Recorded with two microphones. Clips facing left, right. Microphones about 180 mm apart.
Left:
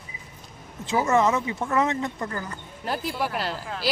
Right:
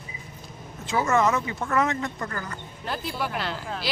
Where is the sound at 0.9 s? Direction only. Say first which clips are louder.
Left 1 dB; 15° left (ahead or behind).